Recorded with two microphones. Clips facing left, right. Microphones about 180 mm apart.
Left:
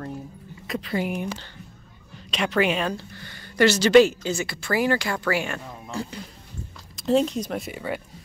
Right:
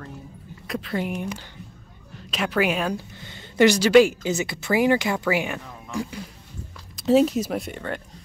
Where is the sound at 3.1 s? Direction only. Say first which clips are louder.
Right 2 dB; 20° right (ahead or behind).